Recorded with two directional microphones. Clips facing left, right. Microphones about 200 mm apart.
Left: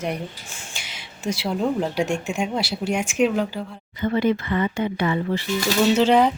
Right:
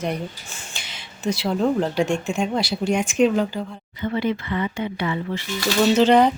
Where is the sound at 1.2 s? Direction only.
10° left (ahead or behind).